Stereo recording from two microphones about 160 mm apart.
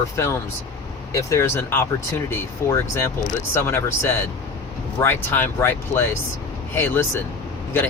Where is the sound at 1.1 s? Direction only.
20° left (ahead or behind).